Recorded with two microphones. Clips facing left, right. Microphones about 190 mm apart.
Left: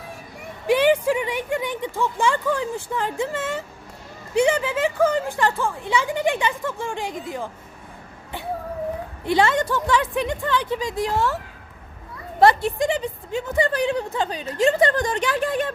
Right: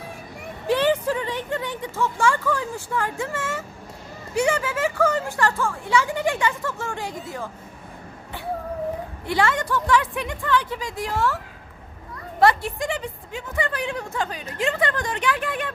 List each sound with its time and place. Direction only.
0.7 s speech: 15° left (ahead or behind)
9.2 s speech: 20° left (ahead or behind)
12.4 s speech: 25° left (ahead or behind)
13.6 s speech: 35° left (ahead or behind)